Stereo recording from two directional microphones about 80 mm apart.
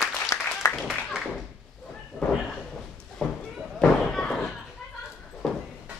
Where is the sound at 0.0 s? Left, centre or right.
Left.